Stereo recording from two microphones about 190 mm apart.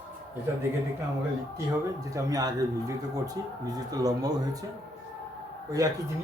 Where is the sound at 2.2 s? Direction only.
20° right (ahead or behind).